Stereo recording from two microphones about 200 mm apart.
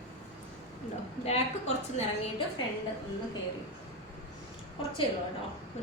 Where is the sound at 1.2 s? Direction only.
30° left (ahead or behind).